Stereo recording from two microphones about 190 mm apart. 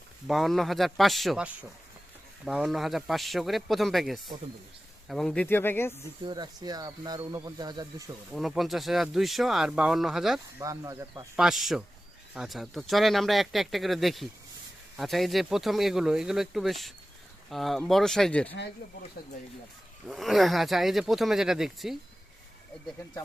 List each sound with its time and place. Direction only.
0.3 s speech: centre (ahead or behind)
6.2 s speech: 20° right (ahead or behind)
8.3 s speech: centre (ahead or behind)
10.6 s speech: 15° right (ahead or behind)
11.3 s speech: centre (ahead or behind)
20.1 s speech: centre (ahead or behind)